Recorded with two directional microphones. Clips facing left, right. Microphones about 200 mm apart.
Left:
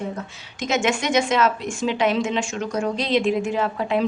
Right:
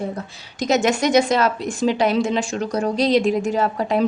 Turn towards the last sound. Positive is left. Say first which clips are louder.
# right 2 dB
turn(degrees=-40)  # may be behind; listen again after turning